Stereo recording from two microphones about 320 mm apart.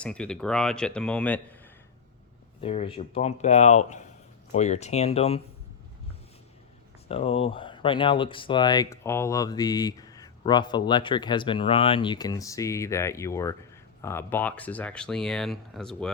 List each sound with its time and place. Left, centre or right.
0.0 s speech: centre
2.6 s speech: centre
7.1 s speech: centre